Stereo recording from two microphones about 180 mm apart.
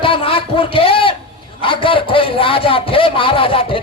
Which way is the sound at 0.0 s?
30° left (ahead or behind).